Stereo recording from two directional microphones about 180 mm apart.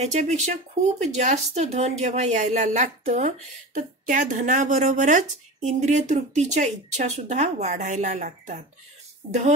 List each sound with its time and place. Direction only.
0.0 s speech: 40° right (ahead or behind)